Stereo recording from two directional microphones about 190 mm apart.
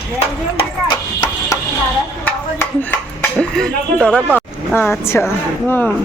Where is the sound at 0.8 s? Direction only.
20° left (ahead or behind).